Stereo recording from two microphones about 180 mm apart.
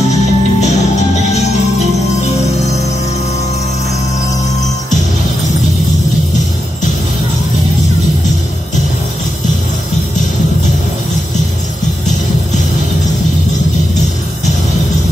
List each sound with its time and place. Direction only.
0.1 s music: 40° left (ahead or behind)